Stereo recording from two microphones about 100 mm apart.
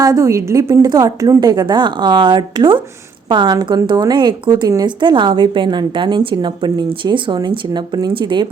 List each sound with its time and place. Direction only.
0.0 s a woman's voice: 35° right (ahead or behind); by 8.4 s 50° right (ahead or behind)